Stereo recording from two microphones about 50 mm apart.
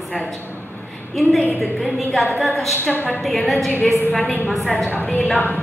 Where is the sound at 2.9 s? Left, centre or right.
Left.